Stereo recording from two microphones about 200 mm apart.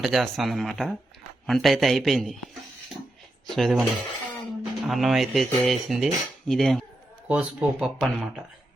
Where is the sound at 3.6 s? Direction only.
Centre (ahead or behind).